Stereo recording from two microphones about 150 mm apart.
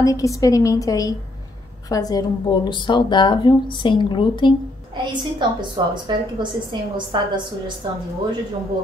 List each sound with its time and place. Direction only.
0.0 s a woman's voice: 20° left (ahead or behind)
4.9 s a woman's voice: 30° right (ahead or behind)